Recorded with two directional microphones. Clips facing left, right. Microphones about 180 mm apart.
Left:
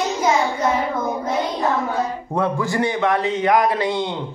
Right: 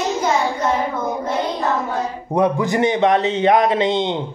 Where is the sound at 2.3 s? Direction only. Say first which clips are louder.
Right 6 dB; 20° right (ahead or behind).